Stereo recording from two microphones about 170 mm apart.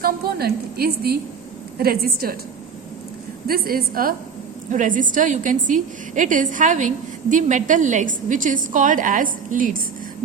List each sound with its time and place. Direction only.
0.0 s a woman's voice: 65° right (ahead or behind)
3.4 s a woman's voice: 60° right (ahead or behind)